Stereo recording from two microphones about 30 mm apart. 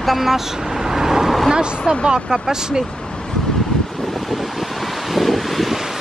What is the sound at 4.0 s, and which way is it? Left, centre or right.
Wind, centre.